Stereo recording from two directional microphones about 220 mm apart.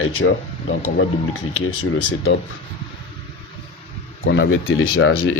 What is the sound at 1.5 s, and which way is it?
Speech, 70° left (ahead or behind).